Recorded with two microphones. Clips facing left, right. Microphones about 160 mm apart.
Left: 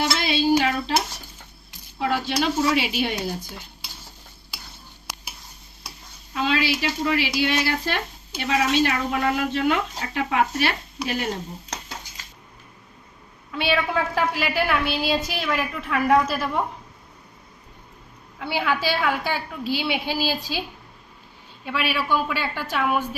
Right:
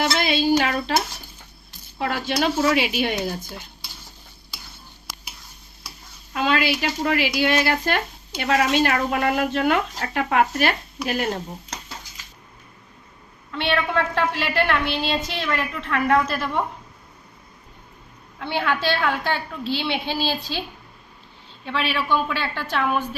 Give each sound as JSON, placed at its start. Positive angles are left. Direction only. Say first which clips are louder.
{"t": 0.0, "sound": "a sound", "louder": "right 2 dB", "side_deg": -55}
{"t": 0.6, "sound": "speech", "louder": "even", "side_deg": -55}
{"t": 2.0, "sound": "speech", "louder": "even", "side_deg": -55}
{"t": 6.3, "sound": "speech", "louder": "right 2 dB", "side_deg": -55}
{"t": 13.5, "sound": "a woman's voice", "louder": "even", "side_deg": 5}
{"t": 18.3, "sound": "a woman's voice", "louder": "even", "side_deg": 5}